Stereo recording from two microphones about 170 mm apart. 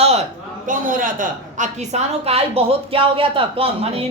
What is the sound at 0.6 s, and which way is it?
A woman's voice, 50° right (ahead or behind).